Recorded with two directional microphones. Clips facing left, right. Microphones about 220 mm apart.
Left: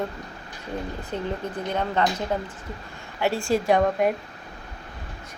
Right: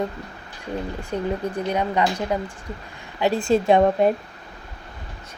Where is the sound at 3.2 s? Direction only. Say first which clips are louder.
Right 4 dB; 20° right (ahead or behind).